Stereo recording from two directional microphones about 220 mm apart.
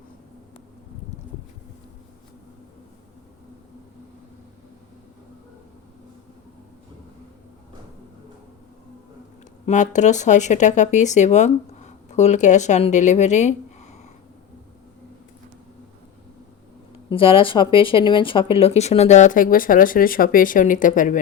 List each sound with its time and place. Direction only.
9.6 s speech: 35° left (ahead or behind)
17.1 s speech: 25° left (ahead or behind)